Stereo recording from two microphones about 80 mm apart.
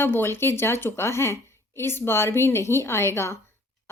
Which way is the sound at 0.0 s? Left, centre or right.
Left.